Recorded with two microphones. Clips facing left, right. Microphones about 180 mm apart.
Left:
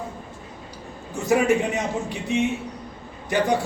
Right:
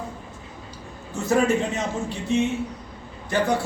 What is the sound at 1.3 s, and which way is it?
A man's voice, 15° left (ahead or behind).